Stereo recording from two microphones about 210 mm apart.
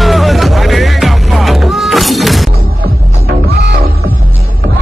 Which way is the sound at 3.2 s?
50° right (ahead or behind).